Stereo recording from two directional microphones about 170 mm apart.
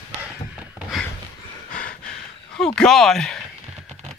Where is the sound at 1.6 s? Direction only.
50° left (ahead or behind).